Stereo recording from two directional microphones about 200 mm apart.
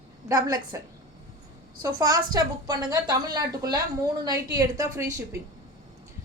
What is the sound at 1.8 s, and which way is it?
A woman's voice, 20° right (ahead or behind).